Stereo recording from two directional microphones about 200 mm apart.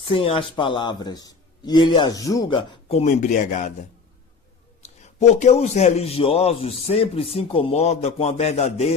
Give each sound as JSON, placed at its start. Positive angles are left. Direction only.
{"t": 0.1, "sound": "a man's voice", "side_deg": 25}